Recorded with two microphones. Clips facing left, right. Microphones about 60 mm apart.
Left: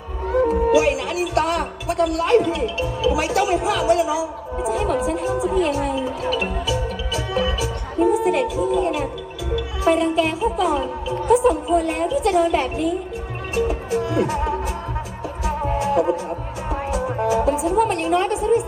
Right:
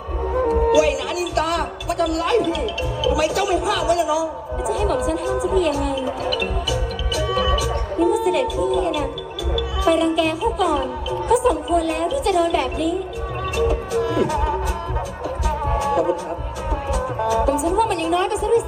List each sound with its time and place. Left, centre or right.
0.4 s speech: left
7.2 s music: left
8.6 s a woman's voice: left
16.9 s music: left
17.7 s speech: left